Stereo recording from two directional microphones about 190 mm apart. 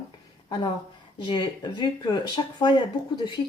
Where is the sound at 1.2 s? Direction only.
25° left (ahead or behind).